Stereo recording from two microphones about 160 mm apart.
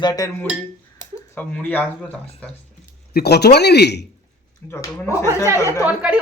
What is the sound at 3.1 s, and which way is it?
Speech, 80° left.